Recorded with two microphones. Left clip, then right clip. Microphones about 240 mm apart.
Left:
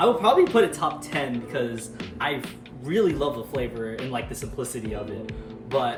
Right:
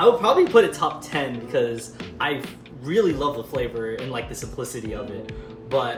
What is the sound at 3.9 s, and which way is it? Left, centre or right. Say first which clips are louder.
Speech: right 1 dB; centre.